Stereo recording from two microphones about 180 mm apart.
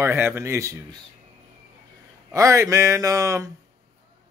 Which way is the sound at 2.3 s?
15° right (ahead or behind).